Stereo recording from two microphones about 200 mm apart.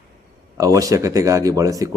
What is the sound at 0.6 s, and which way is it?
Speech, 15° right (ahead or behind).